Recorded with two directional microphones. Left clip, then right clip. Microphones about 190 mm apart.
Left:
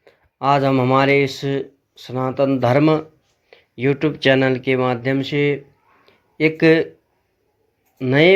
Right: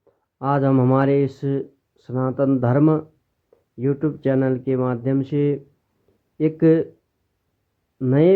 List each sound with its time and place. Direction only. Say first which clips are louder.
0.3 s speech: left 4 dB; 15° right (ahead or behind)
3.8 s speech: left 4 dB; centre (ahead or behind)
7.9 s speech: left 3 dB; 10° right (ahead or behind)